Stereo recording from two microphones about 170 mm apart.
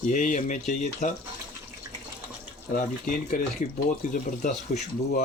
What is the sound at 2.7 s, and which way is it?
Speech, 50° left (ahead or behind).